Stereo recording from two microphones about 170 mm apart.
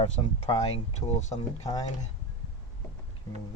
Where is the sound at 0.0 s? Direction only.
30° left (ahead or behind).